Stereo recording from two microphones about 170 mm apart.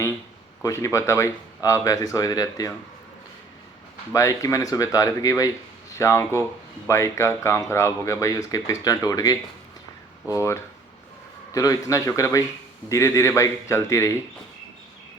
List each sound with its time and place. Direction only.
0.6 s speech: 15° left (ahead or behind)
4.1 s speech: 20° left (ahead or behind)